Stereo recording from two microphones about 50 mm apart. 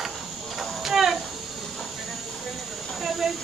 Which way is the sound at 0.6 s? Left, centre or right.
Centre.